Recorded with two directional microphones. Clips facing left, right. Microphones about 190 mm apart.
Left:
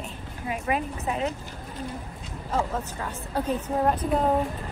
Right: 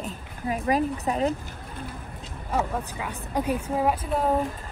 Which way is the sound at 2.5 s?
10° right (ahead or behind).